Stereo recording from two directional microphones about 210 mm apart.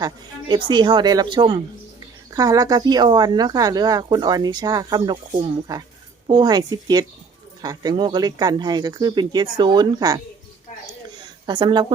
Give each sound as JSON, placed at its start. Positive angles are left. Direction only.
{"t": 0.0, "sound": "speech", "side_deg": -20}
{"t": 11.4, "sound": "speech", "side_deg": -20}